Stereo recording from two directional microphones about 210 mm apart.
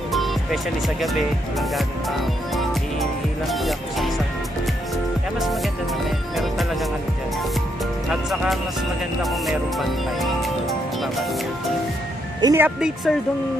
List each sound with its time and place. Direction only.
0.1 s speech: centre (ahead or behind)
6.0 s music: centre (ahead or behind)
8.1 s music: centre (ahead or behind)
9.2 s speech: centre (ahead or behind)
12.4 s speech: 15° right (ahead or behind)